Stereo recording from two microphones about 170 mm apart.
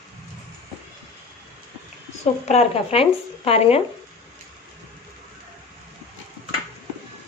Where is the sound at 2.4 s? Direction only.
40° left (ahead or behind).